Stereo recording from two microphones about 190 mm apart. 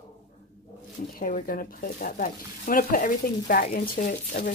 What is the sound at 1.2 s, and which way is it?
Speech, 45° left (ahead or behind).